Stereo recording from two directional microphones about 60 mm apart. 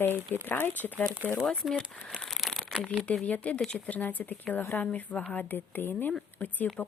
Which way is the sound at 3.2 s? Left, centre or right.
Left.